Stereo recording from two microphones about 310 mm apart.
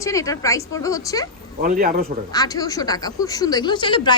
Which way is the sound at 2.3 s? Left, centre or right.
Centre.